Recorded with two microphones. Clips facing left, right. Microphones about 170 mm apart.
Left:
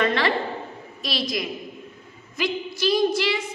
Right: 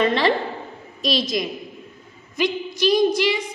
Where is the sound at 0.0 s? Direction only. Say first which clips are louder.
Right 3 dB; 20° right (ahead or behind).